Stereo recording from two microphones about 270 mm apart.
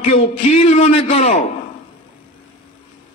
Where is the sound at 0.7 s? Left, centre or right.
Left.